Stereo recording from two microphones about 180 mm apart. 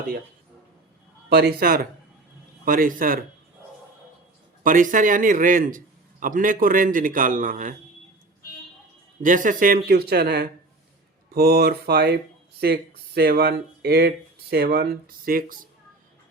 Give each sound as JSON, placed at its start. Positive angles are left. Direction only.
{"t": 1.3, "sound": "a man's voice", "side_deg": -60}
{"t": 4.6, "sound": "a man's voice", "side_deg": -50}
{"t": 9.2, "sound": "a man's voice", "side_deg": -45}